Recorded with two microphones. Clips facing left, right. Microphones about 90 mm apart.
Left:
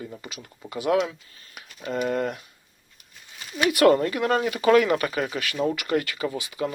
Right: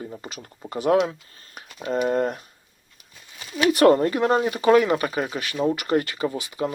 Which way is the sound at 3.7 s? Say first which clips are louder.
Right 2 dB; 30° right (ahead or behind).